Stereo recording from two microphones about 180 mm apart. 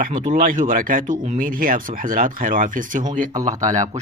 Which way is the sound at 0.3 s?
50° right (ahead or behind).